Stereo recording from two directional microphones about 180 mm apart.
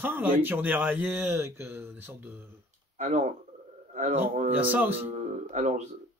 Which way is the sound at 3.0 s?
40° right (ahead or behind).